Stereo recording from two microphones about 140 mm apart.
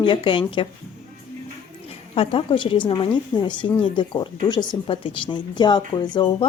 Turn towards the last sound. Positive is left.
turn(degrees=30)  # may be behind; listen again after turning